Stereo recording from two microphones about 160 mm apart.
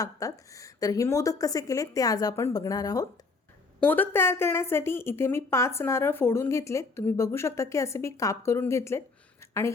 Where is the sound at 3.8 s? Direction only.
10° left (ahead or behind).